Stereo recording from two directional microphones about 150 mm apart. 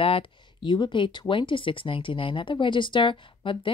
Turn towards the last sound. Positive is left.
turn(degrees=35)  # may be behind; listen again after turning